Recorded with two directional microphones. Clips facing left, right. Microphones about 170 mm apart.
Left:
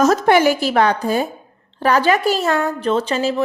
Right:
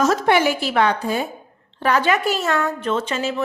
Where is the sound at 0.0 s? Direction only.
40° left (ahead or behind).